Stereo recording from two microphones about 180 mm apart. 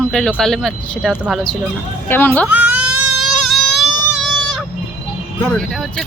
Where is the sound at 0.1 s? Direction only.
5° left (ahead or behind).